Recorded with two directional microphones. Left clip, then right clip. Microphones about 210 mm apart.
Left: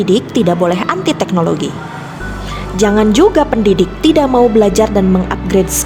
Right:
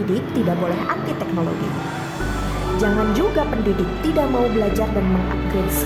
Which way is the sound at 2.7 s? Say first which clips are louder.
Left 10 dB; 40° left (ahead or behind).